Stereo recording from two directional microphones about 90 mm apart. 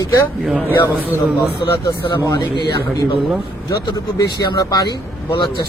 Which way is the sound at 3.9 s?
40° left (ahead or behind).